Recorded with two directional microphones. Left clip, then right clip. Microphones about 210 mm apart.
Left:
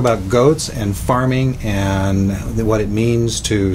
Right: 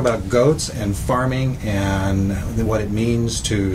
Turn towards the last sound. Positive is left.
turn(degrees=40)  # may be behind; listen again after turning